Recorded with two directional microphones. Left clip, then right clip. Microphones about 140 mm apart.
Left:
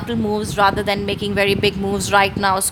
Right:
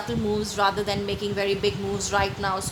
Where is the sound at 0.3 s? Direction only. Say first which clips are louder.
Left 7 dB; 45° left (ahead or behind).